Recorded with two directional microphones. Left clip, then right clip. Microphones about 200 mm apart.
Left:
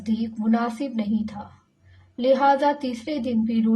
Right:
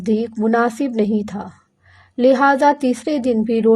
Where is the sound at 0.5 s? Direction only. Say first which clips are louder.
Right 8 dB; 45° right (ahead or behind).